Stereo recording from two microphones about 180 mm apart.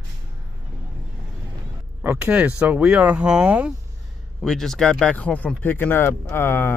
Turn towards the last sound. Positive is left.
turn(degrees=10)  # may be behind; listen again after turning